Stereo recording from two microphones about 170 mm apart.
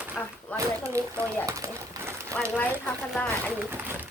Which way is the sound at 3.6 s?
10° right (ahead or behind).